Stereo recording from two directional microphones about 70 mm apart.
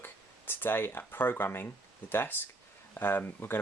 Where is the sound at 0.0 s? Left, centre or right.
Left.